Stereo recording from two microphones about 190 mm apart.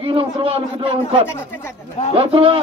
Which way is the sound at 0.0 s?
30° right (ahead or behind).